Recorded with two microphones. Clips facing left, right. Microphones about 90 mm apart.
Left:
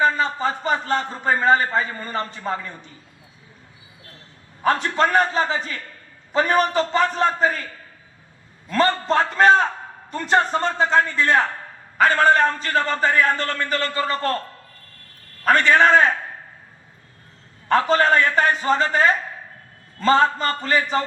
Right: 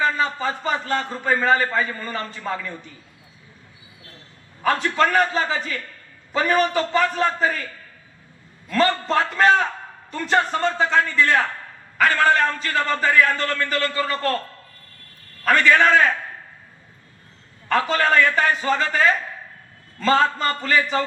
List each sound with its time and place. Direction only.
0.0 s a man's voice: 30° left (ahead or behind)
4.6 s a man's voice: 30° left (ahead or behind)
15.4 s a man's voice: 30° left (ahead or behind)
17.7 s a man's voice: 30° left (ahead or behind)